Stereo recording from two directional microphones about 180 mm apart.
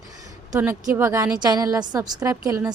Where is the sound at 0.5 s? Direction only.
10° right (ahead or behind).